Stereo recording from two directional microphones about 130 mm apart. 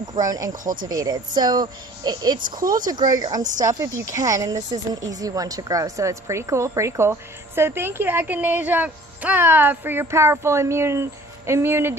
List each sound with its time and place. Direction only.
0.0 s a woman's voice: 30° right (ahead or behind)